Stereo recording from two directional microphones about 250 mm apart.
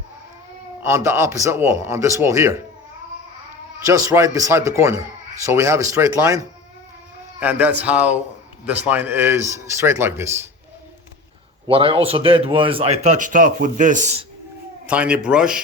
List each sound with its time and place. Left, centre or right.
0.8 s speech: centre
3.8 s speech: centre
11.7 s speech: right
14.8 s a man's voice: centre